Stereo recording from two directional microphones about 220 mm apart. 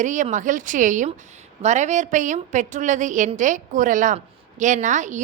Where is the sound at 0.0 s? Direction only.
35° right (ahead or behind).